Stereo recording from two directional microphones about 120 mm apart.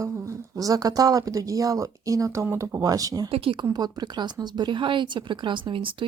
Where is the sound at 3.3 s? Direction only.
50° right (ahead or behind).